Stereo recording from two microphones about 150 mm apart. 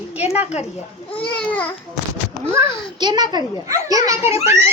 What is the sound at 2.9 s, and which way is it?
A child's voice, 30° right (ahead or behind).